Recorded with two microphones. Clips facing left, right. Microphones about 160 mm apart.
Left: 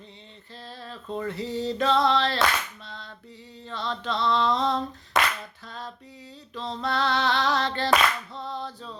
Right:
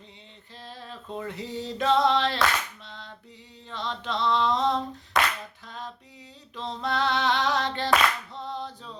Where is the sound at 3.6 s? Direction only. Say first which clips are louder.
Left 2 dB; 15° right (ahead or behind).